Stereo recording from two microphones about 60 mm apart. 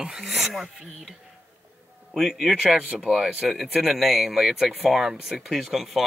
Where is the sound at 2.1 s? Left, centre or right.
Centre.